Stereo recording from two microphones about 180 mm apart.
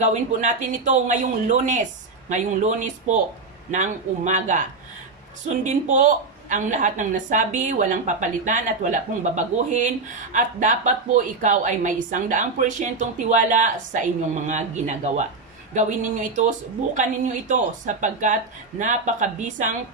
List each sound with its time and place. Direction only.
0.0 s a woman's voice: 40° right (ahead or behind)